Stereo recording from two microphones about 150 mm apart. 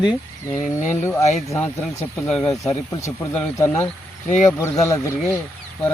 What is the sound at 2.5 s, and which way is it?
Speech, 20° left (ahead or behind).